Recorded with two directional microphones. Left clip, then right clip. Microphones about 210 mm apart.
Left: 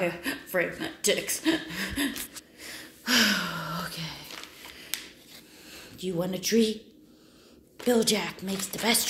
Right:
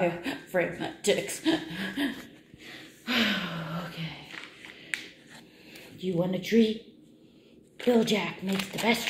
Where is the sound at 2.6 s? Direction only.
25° left (ahead or behind).